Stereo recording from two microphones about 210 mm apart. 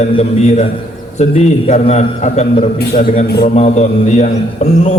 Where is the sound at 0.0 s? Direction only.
30° left (ahead or behind).